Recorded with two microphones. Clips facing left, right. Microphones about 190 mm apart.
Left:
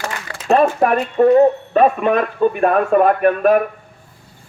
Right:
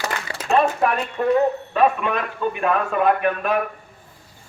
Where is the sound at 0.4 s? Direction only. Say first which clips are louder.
Left 5 dB; 45° left (ahead or behind).